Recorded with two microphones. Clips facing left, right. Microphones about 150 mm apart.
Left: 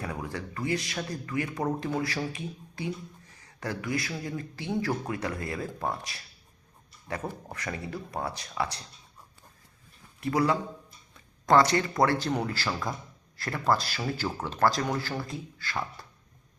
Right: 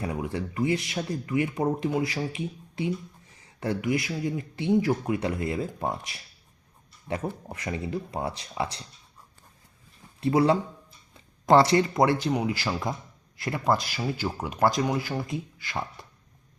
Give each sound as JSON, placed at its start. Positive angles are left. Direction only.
{"t": 0.0, "sound": "speech", "side_deg": -20}
{"t": 10.2, "sound": "speech", "side_deg": -25}